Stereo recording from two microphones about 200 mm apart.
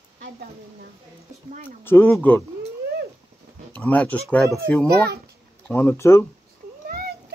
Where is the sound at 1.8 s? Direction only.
10° left (ahead or behind).